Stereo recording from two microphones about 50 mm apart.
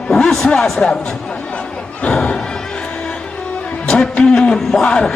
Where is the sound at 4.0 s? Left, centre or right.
Centre.